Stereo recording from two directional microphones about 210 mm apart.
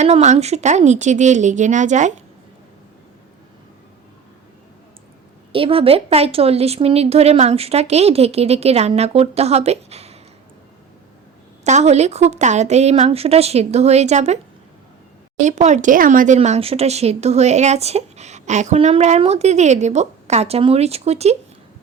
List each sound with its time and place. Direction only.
0.0 s speech: 35° right (ahead or behind)
5.5 s speech: 25° right (ahead or behind)
11.6 s speech: 35° right (ahead or behind)
15.4 s speech: 35° right (ahead or behind)